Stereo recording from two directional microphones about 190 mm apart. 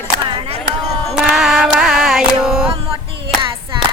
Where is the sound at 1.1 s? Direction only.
Centre (ahead or behind).